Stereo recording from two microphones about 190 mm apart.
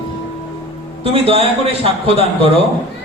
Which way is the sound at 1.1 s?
30° right (ahead or behind).